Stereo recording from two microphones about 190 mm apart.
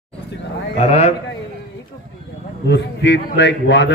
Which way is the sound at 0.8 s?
35° left (ahead or behind).